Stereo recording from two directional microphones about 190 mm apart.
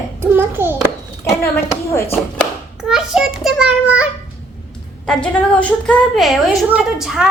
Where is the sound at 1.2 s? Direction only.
15° left (ahead or behind).